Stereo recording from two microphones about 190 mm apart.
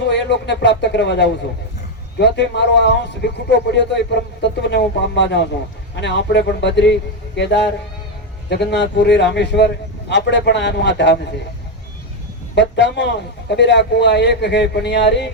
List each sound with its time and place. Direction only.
0.1 s a man's voice: 65° left (ahead or behind)
12.5 s a man's voice: 65° left (ahead or behind)